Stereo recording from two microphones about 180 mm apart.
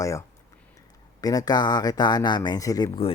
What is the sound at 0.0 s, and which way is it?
Speech, 15° left (ahead or behind).